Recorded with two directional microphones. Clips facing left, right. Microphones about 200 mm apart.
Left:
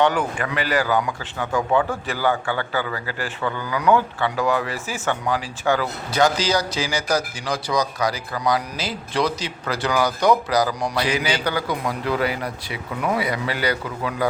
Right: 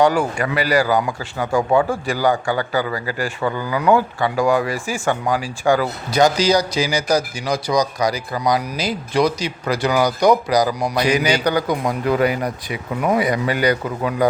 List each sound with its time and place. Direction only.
0.0 s a man's voice: 10° right (ahead or behind)
0.9 s speech: 35° right (ahead or behind)
1.2 s a man's voice: 10° right (ahead or behind)
11.7 s speech: 45° right (ahead or behind)